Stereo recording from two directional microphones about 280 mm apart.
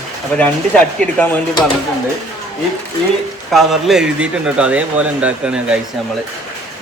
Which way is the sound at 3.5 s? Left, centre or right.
Centre.